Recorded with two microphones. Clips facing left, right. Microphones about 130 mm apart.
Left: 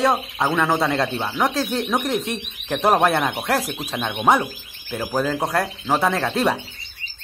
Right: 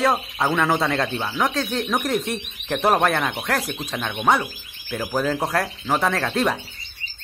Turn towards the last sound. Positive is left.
turn(degrees=5)  # may be behind; listen again after turning